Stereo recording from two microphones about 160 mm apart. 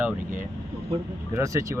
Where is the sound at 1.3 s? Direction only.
20° right (ahead or behind).